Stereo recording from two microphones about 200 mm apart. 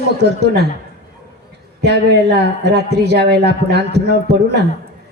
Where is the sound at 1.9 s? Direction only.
55° right (ahead or behind).